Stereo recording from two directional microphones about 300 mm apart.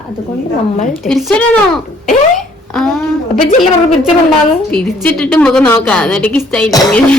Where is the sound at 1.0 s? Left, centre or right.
Centre.